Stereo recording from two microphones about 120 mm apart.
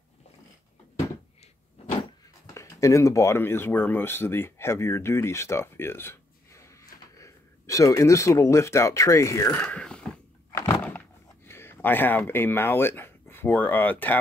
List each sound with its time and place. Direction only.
2.5 s speech: 25° left (ahead or behind)
9.7 s mechanisms: 10° left (ahead or behind)
11.4 s speech: 20° left (ahead or behind)